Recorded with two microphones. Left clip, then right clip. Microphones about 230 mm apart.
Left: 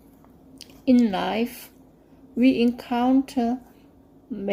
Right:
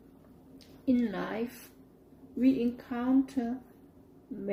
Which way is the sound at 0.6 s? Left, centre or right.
Left.